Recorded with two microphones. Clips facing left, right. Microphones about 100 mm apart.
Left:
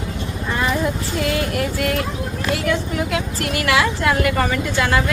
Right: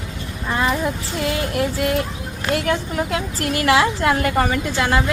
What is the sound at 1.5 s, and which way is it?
A woman's voice, 20° right (ahead or behind).